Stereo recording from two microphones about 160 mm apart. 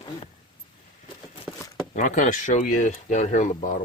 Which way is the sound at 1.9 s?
50° left (ahead or behind).